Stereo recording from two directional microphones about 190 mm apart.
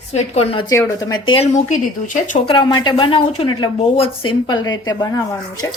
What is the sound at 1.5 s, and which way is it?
Speech, 40° left (ahead or behind).